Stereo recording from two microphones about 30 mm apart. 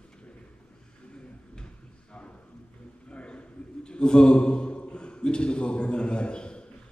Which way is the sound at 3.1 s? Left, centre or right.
Left.